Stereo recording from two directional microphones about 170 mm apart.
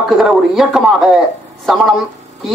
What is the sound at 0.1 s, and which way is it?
Speech, 5° right (ahead or behind).